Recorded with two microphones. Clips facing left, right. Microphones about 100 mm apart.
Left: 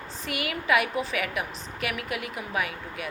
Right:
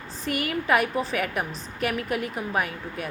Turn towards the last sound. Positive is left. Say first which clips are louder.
# right 2 dB
turn(degrees=-40)  # may be behind; listen again after turning